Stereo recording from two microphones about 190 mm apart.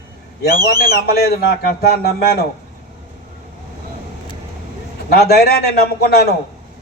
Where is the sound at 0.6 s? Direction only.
50° left (ahead or behind).